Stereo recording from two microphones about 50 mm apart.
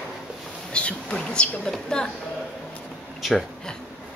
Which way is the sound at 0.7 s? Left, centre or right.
Left.